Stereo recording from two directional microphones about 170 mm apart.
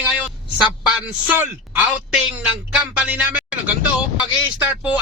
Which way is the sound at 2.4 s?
5° right (ahead or behind).